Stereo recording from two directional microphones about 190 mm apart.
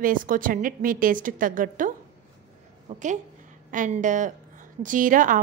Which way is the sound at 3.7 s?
45° right (ahead or behind).